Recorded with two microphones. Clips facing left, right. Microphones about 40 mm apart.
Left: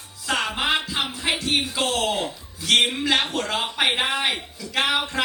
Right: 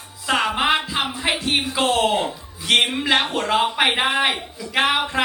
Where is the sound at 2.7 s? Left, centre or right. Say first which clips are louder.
Right 2 dB; right.